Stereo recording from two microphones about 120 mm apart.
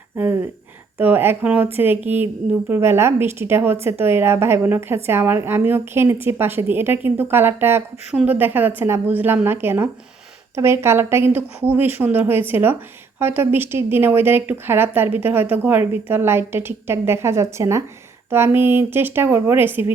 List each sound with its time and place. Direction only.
0.1 s a woman's voice: 15° right (ahead or behind)